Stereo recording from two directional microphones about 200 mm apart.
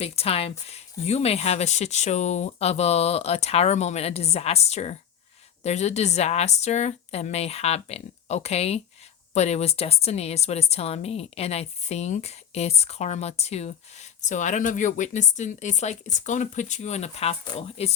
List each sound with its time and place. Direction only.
0.0 s speech: 30° left (ahead or behind)